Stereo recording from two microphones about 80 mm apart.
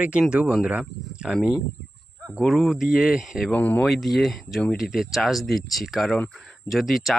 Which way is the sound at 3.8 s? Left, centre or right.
Centre.